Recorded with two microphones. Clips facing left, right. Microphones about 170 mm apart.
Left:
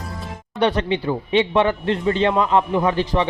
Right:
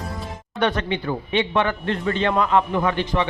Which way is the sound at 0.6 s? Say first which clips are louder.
Left 3 dB; 30° left (ahead or behind).